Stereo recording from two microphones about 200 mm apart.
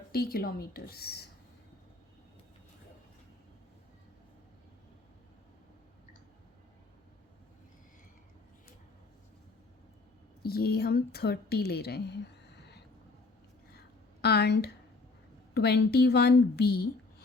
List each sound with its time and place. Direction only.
0.1 s a woman's voice: 50° left (ahead or behind)
10.4 s a woman's voice: 50° left (ahead or behind)
13.7 s a sound: 55° left (ahead or behind)
15.5 s a woman's voice: 55° left (ahead or behind)